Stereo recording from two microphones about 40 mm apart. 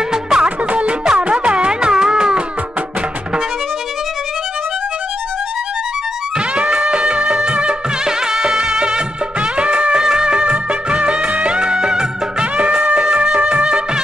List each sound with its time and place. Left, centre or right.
0.1 s music: centre
0.7 s music: right
6.5 s music: right
8.3 s music: centre
10.0 s music of bollywood: right